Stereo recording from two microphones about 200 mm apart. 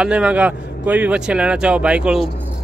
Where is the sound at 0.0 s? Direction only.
5° right (ahead or behind).